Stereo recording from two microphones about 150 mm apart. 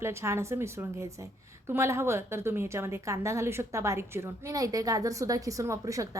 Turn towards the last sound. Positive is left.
turn(degrees=-20)  # may be behind; listen again after turning